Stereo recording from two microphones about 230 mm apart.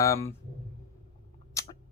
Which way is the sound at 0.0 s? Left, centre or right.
Centre.